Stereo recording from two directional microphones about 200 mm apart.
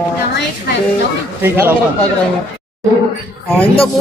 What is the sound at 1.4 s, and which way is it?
Speech, 10° right (ahead or behind).